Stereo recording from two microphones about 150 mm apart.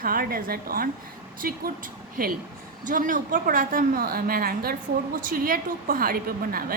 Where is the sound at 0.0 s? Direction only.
75° right (ahead or behind).